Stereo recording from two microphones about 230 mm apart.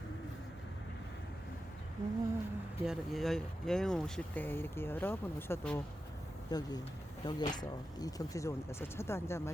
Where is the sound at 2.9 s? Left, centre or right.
Centre.